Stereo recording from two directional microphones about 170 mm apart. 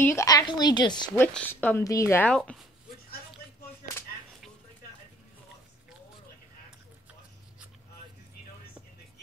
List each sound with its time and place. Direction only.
0.0 s a woman's voice: 15° left (ahead or behind)
1.1 s a woman's voice: 10° left (ahead or behind)